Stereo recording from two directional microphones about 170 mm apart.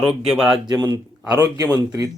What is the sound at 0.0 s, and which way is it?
Speech, 5° right (ahead or behind).